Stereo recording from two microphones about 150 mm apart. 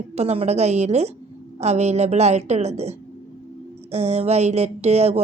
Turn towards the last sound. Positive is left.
turn(degrees=-45)  # may be behind; listen again after turning